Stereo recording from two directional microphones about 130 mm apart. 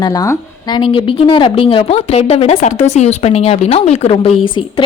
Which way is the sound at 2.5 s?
65° left (ahead or behind).